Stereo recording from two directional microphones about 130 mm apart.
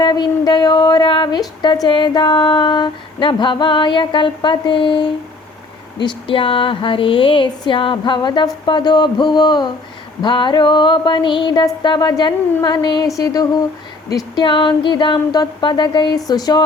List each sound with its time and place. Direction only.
0.0 s a woman's voice: 35° left (ahead or behind)
13.1 s a sound: 30° left (ahead or behind)
14.3 s a woman's voice: 40° left (ahead or behind)